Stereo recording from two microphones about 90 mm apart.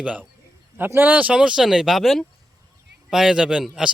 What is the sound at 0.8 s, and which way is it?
Speech, 25° right (ahead or behind).